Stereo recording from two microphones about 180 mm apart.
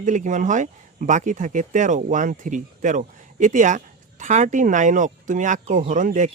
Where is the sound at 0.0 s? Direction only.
45° right (ahead or behind).